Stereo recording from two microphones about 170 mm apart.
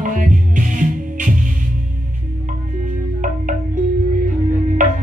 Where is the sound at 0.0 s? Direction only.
50° right (ahead or behind).